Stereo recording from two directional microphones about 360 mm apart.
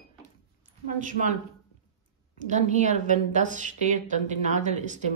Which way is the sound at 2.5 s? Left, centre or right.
Centre.